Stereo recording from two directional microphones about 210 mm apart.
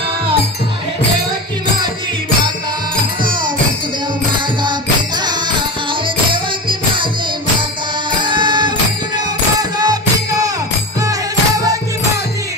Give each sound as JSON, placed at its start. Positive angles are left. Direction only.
{"t": 4.6, "sound": "music", "side_deg": -20}
{"t": 6.3, "sound": "music", "side_deg": -25}
{"t": 8.1, "sound": "music", "side_deg": -20}
{"t": 11.0, "sound": "music", "side_deg": -15}